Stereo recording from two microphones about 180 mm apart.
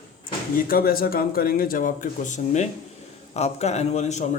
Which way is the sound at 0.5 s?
55° left (ahead or behind).